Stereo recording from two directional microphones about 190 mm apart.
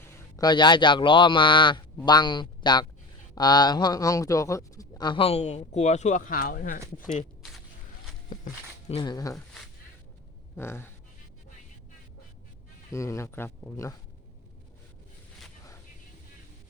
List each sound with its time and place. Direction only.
0.1 s a man's voice: 20° left (ahead or behind); by 7.0 s 50° left (ahead or behind)
8.9 s a man's voice: 25° left (ahead or behind)
10.6 s speech: 15° left (ahead or behind)
12.9 s speech: 15° left (ahead or behind)